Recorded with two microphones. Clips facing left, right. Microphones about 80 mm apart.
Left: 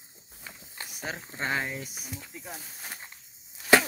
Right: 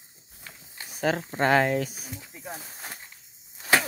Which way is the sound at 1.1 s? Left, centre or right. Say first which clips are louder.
Right 10 dB; right.